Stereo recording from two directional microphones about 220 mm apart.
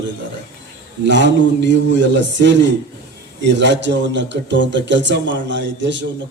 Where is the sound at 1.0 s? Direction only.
55° right (ahead or behind).